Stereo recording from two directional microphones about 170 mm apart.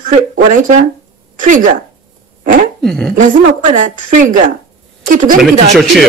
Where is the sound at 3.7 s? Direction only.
50° right (ahead or behind).